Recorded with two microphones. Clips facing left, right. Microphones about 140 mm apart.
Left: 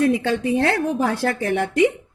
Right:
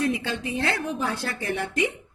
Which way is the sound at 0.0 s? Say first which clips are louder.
Left 8 dB; 55° left (ahead or behind).